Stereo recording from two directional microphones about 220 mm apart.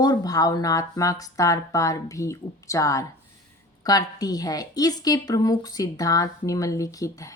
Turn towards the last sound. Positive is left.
turn(degrees=15)  # may be behind; listen again after turning